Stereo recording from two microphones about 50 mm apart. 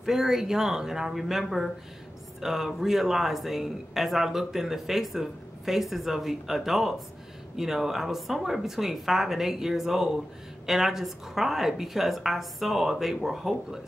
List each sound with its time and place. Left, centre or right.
0.0 s speech: centre